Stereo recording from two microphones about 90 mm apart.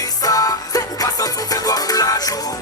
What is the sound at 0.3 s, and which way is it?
Music, 45° left (ahead or behind).